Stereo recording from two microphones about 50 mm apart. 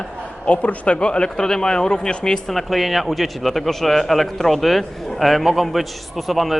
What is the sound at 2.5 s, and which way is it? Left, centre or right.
A man's voice, centre.